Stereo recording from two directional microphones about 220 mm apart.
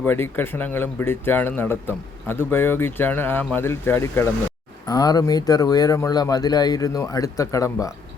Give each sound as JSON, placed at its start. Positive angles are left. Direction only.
{"t": 0.0, "sound": "speech", "side_deg": 10}